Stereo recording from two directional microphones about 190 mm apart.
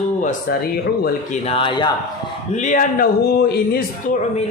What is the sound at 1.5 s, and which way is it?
Speech, 25° left (ahead or behind).